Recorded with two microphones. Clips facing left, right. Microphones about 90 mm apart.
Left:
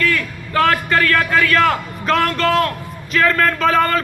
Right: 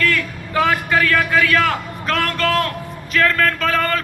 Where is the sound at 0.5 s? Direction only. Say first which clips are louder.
Left 1 dB; 10° right (ahead or behind).